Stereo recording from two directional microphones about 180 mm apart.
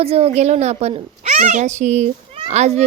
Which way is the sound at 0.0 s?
35° right (ahead or behind).